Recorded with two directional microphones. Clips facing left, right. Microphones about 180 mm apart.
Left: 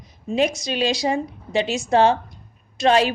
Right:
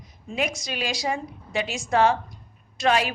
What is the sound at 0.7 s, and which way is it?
A woman's voice, 25° left (ahead or behind).